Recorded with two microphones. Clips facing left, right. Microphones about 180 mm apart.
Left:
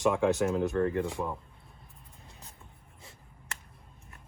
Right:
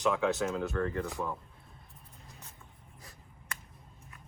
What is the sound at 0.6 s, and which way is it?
Speech, 30° left (ahead or behind).